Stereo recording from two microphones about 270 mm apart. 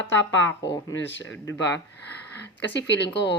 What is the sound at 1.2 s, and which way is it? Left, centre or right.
Speech, centre.